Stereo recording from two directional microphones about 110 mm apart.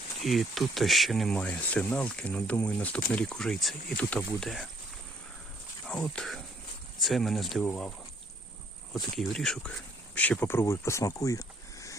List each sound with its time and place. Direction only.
0.2 s speech: centre (ahead or behind)
1.4 s speech: 10° left (ahead or behind)
4.4 s speech: centre (ahead or behind)
5.8 s speech: 5° left (ahead or behind)
10.2 s speech: 15° left (ahead or behind)